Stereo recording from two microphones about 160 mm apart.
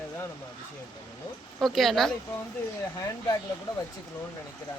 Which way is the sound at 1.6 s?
Centre (ahead or behind).